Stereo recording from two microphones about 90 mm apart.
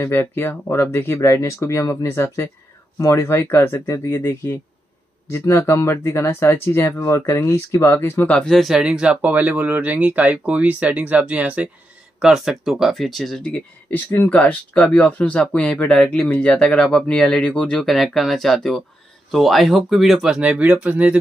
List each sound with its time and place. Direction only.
0.0 s speech: 25° left (ahead or behind)
8.3 s speech: 15° left (ahead or behind)
8.5 s speech: centre (ahead or behind)
13.4 s speech: 15° left (ahead or behind)
17.8 s speech: centre (ahead or behind); by 21.2 s 15° right (ahead or behind)